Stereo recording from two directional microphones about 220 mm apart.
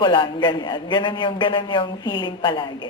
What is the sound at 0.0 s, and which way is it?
A woman's voice, 20° left (ahead or behind).